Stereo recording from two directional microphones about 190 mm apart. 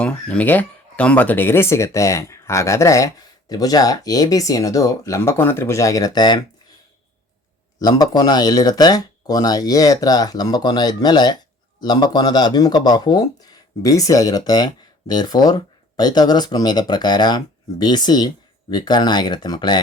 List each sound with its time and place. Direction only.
0.0 s speech: 5° left (ahead or behind)
7.8 s speech: 20° left (ahead or behind)